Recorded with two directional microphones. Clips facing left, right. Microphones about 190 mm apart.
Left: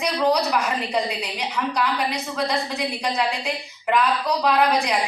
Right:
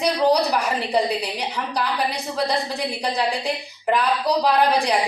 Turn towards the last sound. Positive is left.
turn(degrees=-35)  # may be behind; listen again after turning